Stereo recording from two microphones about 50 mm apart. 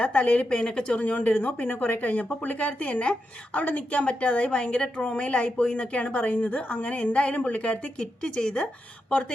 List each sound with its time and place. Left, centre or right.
0.0 s a woman's voice: left